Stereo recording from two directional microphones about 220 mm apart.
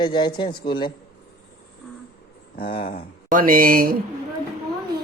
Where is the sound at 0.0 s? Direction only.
20° left (ahead or behind).